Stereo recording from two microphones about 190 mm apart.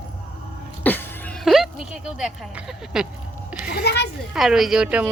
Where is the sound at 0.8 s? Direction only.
10° left (ahead or behind).